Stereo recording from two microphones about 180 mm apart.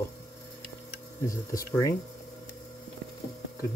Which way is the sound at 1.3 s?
20° left (ahead or behind).